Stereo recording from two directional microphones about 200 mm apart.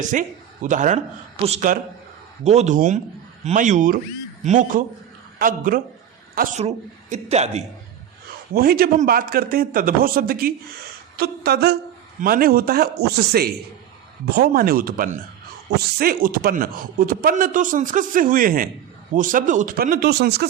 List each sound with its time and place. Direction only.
0.0 s a man's voice: 40° right (ahead or behind)
6.6 s speech: 30° right (ahead or behind)
8.5 s a man's voice: 50° right (ahead or behind)